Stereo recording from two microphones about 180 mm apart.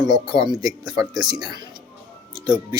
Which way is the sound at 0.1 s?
25° right (ahead or behind).